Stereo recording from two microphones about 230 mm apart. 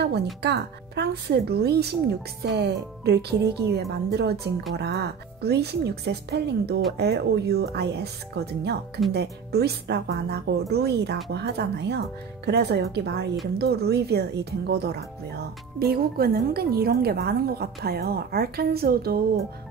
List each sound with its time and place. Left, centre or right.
0.0 s speech: right